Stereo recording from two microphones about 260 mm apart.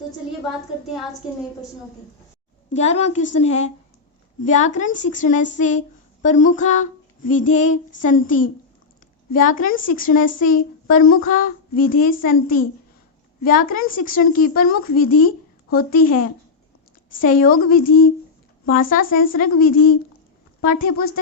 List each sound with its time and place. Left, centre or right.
2.6 s child singing: left
9.3 s a woman's voice: left
17.2 s a woman's voice: left